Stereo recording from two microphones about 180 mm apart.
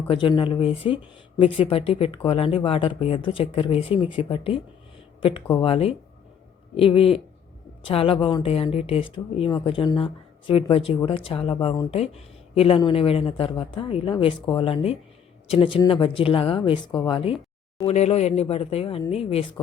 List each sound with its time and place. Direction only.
0.1 s speech: 25° left (ahead or behind)